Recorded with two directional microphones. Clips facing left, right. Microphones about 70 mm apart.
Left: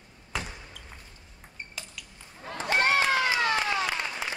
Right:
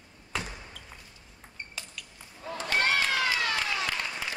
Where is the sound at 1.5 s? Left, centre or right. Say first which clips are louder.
Even; centre.